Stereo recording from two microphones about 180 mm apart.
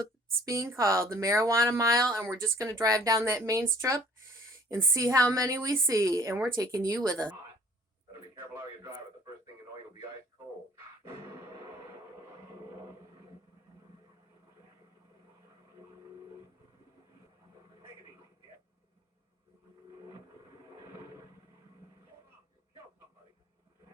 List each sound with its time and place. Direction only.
0.4 s speech: 15° right (ahead or behind)